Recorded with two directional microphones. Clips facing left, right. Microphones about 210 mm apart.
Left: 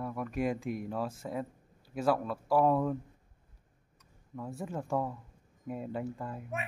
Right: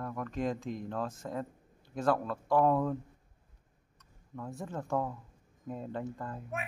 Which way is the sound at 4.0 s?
10° left (ahead or behind).